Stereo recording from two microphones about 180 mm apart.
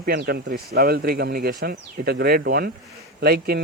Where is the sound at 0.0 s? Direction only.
60° right (ahead or behind).